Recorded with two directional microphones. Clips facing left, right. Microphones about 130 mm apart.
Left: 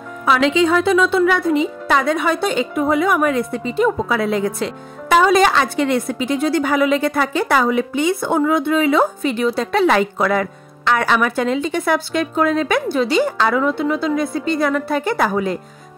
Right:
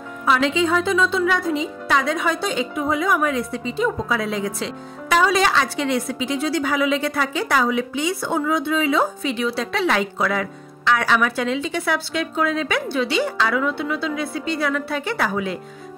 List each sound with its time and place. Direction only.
0.2 s speech: 85° left; by 15.6 s 45° left (ahead or behind)